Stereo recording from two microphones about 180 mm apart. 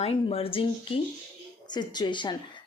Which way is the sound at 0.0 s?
35° left (ahead or behind).